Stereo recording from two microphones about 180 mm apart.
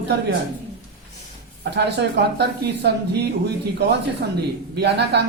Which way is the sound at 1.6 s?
70° right (ahead or behind).